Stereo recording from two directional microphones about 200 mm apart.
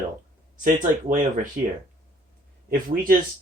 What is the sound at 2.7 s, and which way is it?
Speech, 50° right (ahead or behind).